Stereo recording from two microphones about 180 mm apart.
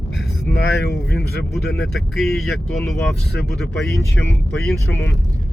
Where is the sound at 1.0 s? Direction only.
60° left (ahead or behind).